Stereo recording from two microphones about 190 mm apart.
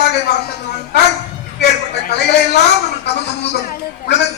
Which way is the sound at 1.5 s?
60° left (ahead or behind).